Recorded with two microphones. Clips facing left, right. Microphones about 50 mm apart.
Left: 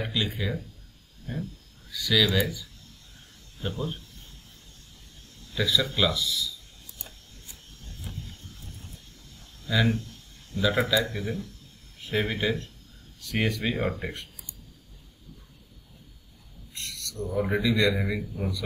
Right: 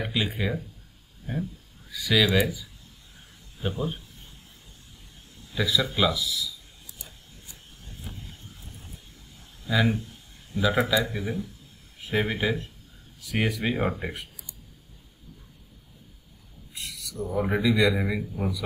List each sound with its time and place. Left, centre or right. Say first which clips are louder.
0.0 s speech: right 2 dB; centre
5.5 s speech: even; centre
7.8 s vehicle: left 1 dB; centre
9.7 s speech: right 1 dB; centre
16.7 s speech: right 1 dB; centre